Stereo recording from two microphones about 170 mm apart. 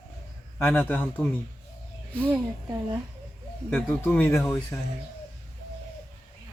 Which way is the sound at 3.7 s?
10° left (ahead or behind).